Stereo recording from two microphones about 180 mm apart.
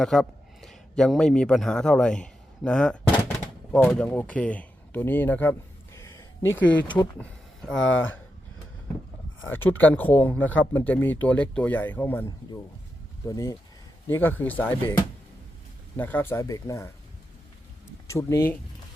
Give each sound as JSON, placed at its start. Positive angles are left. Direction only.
{"t": 0.0, "sound": "speech", "side_deg": 0}
{"t": 7.2, "sound": "a sound", "side_deg": 5}
{"t": 9.5, "sound": "speech", "side_deg": 10}
{"t": 13.2, "sound": "speech", "side_deg": 20}
{"t": 18.1, "sound": "speech", "side_deg": 15}